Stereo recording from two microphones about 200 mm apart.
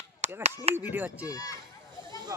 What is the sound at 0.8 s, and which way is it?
Speech, 10° right (ahead or behind).